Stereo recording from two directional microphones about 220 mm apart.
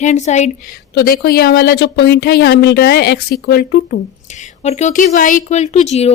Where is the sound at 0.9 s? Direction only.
45° left (ahead or behind).